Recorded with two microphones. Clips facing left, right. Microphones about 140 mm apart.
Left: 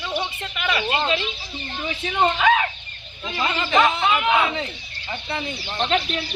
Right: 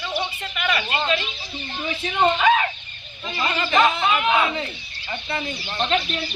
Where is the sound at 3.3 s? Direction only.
15° left (ahead or behind).